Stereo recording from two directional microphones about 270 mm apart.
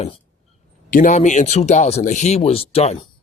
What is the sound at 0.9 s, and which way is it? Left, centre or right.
A man's voice, left.